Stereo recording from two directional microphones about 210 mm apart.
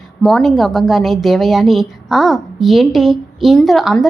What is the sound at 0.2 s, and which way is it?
A woman's voice, 5° left (ahead or behind).